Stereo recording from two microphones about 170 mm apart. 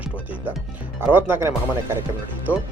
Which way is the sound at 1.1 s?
10° right (ahead or behind).